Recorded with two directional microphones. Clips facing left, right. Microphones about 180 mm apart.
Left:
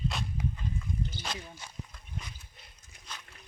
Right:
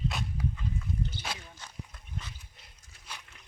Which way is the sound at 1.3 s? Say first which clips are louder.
Left 1 dB; 10° right (ahead or behind).